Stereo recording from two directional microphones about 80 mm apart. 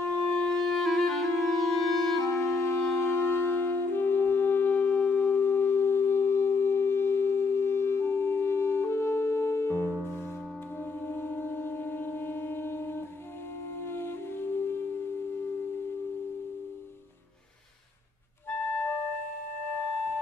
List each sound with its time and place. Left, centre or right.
0.0 s music: left
0.4 s clarinet: centre
2.2 s clarinet: left
3.0 s music: left
11.1 s music: left
18.7 s music: centre